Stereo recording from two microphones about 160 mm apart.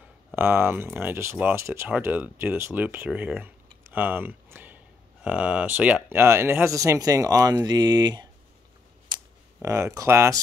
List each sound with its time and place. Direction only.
0.4 s speech: 15° right (ahead or behind)
9.1 s a sound: 30° right (ahead or behind)
9.6 s speech: 15° right (ahead or behind)